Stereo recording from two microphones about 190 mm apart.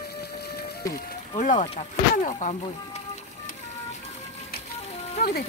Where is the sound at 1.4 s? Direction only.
40° left (ahead or behind).